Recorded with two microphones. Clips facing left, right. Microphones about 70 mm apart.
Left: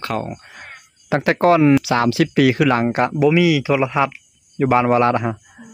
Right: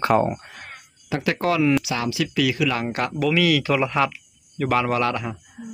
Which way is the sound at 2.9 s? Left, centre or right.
Left.